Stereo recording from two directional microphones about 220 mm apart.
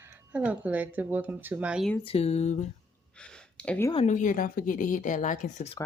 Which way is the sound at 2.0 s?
25° left (ahead or behind).